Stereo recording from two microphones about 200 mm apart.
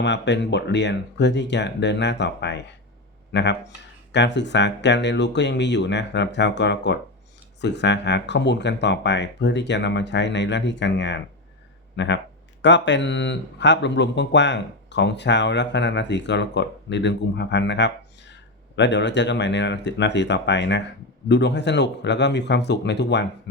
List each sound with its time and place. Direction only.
0.0 s speech: 60° left (ahead or behind)